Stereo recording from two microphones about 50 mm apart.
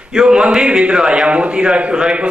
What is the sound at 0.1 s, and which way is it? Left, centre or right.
A man's voice, centre.